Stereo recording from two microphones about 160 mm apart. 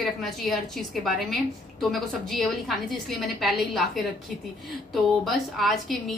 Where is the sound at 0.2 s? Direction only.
Centre (ahead or behind).